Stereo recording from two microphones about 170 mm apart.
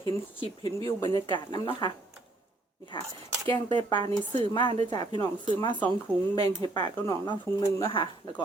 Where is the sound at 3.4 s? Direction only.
25° left (ahead or behind).